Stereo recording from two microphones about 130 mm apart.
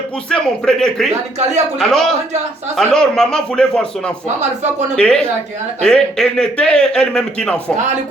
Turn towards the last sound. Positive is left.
turn(degrees=5)  # may be behind; listen again after turning